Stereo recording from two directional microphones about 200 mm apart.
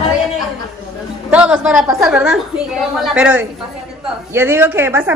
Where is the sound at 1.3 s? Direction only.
5° right (ahead or behind).